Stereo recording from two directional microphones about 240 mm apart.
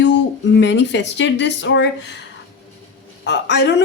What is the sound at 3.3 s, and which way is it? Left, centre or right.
Speech, left.